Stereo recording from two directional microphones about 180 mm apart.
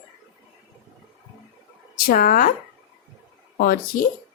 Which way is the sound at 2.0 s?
55° left (ahead or behind).